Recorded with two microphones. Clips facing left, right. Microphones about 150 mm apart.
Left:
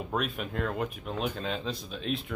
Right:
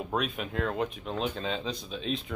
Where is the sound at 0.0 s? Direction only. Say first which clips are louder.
Right 1 dB; centre (ahead or behind).